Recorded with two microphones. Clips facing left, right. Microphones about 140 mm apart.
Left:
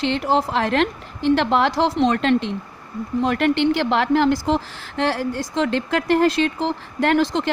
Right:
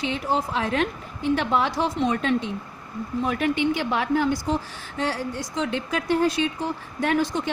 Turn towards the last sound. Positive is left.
turn(degrees=90)